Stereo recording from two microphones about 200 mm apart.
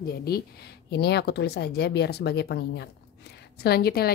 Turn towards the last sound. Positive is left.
turn(degrees=50)  # may be behind; listen again after turning